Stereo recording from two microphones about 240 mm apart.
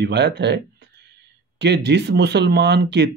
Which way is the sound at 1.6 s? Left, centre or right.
Right.